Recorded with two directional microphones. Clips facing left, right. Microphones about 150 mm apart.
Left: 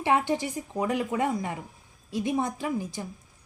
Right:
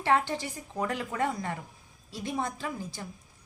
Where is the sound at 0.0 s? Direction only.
15° left (ahead or behind).